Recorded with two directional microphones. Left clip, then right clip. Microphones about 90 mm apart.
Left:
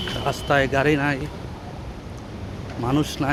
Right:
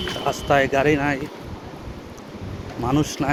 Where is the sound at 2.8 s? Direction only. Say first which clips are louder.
Right 1 dB; 30° left (ahead or behind).